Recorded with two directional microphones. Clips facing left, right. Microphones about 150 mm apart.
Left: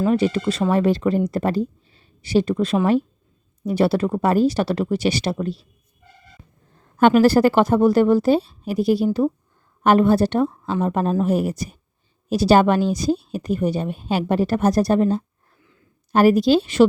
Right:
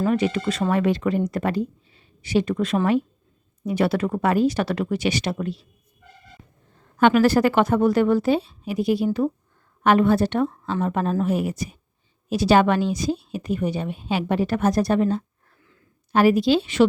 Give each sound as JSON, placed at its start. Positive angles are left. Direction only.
{"t": 0.1, "sound": "speech", "side_deg": 35}
{"t": 6.9, "sound": "speech", "side_deg": 40}
{"t": 10.4, "sound": "speech", "side_deg": 10}
{"t": 10.8, "sound": "speech", "side_deg": 35}